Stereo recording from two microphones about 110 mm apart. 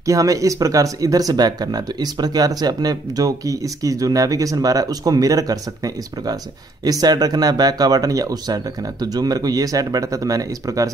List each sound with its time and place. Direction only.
0.0 s speech: 30° right (ahead or behind)